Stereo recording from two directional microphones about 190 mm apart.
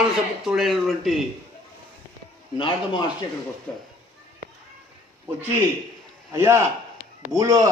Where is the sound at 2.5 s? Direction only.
25° left (ahead or behind).